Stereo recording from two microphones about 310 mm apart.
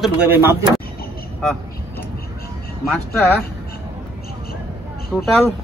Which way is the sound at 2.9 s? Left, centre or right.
Centre.